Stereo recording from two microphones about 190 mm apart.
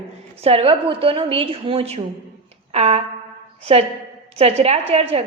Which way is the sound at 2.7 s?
35° right (ahead or behind).